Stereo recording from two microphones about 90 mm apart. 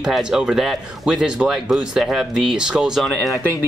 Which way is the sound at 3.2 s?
35° left (ahead or behind).